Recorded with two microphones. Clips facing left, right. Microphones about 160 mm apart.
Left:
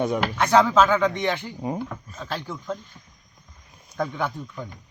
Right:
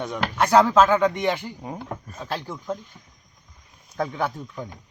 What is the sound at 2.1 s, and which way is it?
Speech, 10° right (ahead or behind).